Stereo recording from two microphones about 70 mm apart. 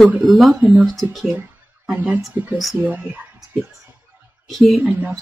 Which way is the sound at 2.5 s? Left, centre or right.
Centre.